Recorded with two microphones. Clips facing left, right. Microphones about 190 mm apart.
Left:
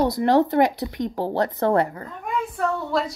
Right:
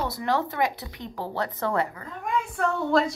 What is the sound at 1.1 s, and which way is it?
Speech, 30° left (ahead or behind).